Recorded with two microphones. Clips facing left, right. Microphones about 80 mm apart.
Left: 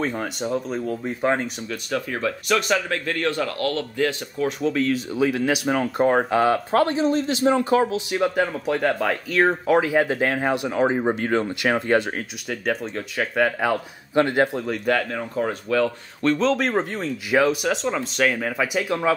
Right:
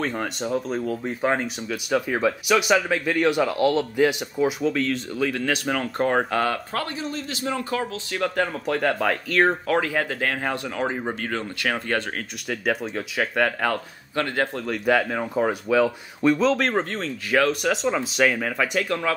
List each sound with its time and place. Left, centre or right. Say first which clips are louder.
0.0 s speech: left 1 dB; centre
6.7 s speech: left 9 dB; left
12.4 s speech: right 1 dB; centre
14.1 s speech: left 5 dB; centre
14.6 s speech: right 1 dB; centre
17.8 s speech: right 2 dB; centre